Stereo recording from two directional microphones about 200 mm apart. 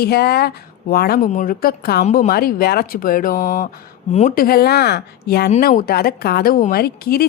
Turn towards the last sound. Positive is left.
turn(degrees=50)  # may be behind; listen again after turning